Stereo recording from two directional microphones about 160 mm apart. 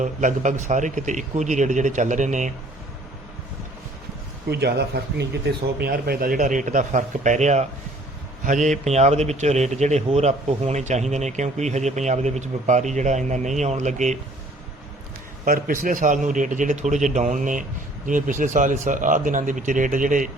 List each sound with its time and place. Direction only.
0.0 s speech: 50° right (ahead or behind)
4.4 s speech: 90° right; by 14.2 s 50° right (ahead or behind)
15.4 s speech: 60° right (ahead or behind)